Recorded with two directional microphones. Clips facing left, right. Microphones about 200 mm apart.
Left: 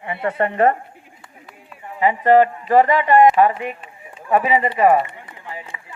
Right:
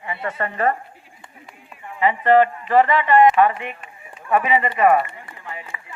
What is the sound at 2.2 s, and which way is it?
Speech, 40° left (ahead or behind).